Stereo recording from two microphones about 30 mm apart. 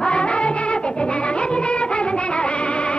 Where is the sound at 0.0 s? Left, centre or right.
Left.